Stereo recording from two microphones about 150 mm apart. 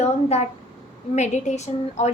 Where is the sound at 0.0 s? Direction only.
45° left (ahead or behind).